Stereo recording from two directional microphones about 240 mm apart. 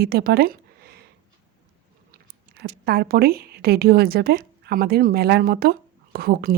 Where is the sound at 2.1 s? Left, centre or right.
Right.